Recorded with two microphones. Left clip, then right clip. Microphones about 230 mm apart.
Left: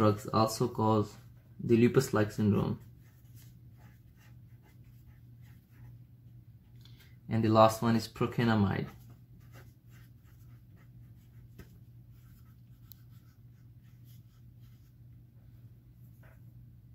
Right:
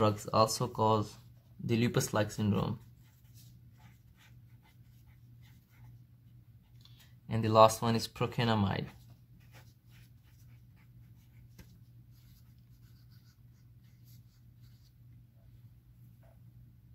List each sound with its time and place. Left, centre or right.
0.0 s speech: right
7.2 s speech: right